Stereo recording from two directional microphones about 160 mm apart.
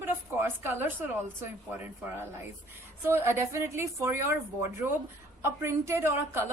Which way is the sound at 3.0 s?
15° right (ahead or behind).